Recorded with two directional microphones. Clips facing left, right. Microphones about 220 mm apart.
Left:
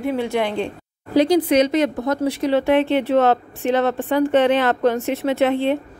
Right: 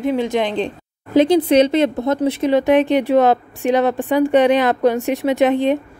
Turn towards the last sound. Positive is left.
turn(degrees=-15)  # may be behind; listen again after turning